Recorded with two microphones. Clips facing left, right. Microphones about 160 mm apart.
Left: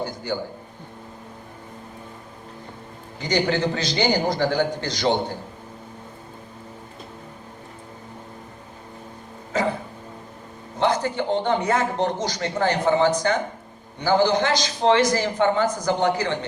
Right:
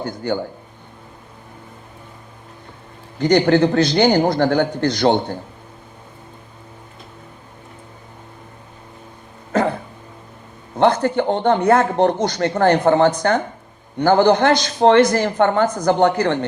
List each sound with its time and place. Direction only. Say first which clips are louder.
0.0 s speech: right 4 dB; 55° right (ahead or behind)
3.2 s speech: right 8 dB; 55° right (ahead or behind)
9.5 s dog: right 5 dB; 55° right (ahead or behind)
10.8 s speech: right 6 dB; 55° right (ahead or behind)